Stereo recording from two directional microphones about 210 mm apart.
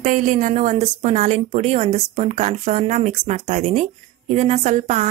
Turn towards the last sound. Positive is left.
turn(degrees=-35)  # may be behind; listen again after turning